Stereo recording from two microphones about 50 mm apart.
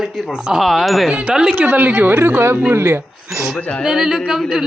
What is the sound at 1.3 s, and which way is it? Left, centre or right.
Speech, centre.